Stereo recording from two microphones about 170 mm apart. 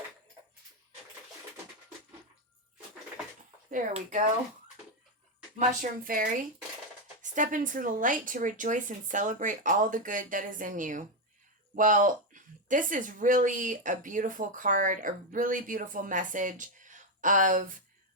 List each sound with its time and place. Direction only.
3.7 s speech: 50° right (ahead or behind)
5.5 s speech: 55° right (ahead or behind)